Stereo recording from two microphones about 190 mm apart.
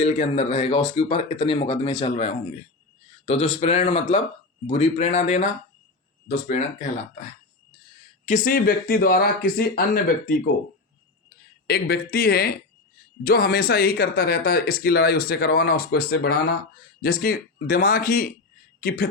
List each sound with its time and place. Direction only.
0.0 s speech: 35° left (ahead or behind)
11.7 s speech: 55° left (ahead or behind)